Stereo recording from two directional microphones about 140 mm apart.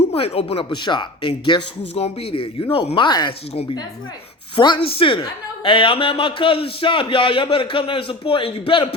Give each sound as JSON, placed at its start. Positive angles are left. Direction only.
{"t": 0.1, "sound": "a man's voice", "side_deg": 40}
{"t": 3.5, "sound": "a woman's voice", "side_deg": 45}
{"t": 4.5, "sound": "a man's voice", "side_deg": 35}